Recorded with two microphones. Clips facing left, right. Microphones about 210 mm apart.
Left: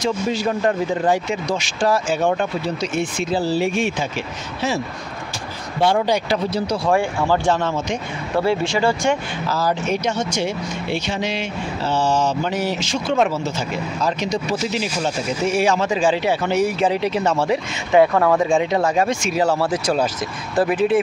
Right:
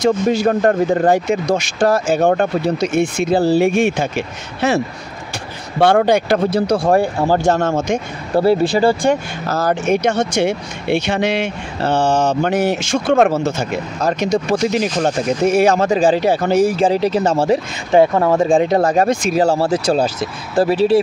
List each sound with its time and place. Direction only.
0.0 s speech: 55° right (ahead or behind)
6.9 s speech: 40° right (ahead or behind); by 15.9 s 55° right (ahead or behind)
15.9 s speech: 40° right (ahead or behind)
18.6 s speech: 40° right (ahead or behind)